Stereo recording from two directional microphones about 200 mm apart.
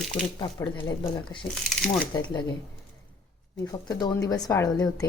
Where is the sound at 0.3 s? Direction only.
20° left (ahead or behind).